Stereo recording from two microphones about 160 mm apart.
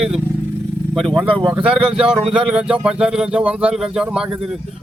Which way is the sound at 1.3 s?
30° right (ahead or behind).